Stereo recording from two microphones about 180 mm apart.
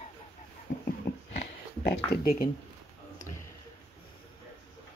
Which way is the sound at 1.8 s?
60° left (ahead or behind).